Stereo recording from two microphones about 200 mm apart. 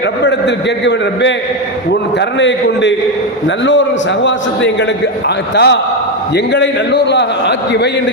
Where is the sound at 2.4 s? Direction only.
65° left (ahead or behind).